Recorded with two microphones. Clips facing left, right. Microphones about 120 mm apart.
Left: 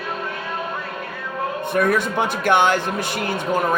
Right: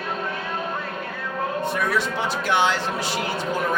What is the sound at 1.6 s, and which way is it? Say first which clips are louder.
Speech: left 7 dB; 55° left (ahead or behind).